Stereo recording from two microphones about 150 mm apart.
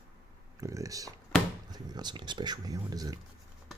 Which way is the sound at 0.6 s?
20° right (ahead or behind).